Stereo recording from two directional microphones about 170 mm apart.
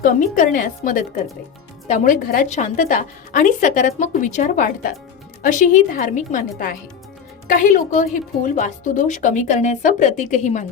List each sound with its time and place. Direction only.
0.0 s a woman's voice: 50° left (ahead or behind)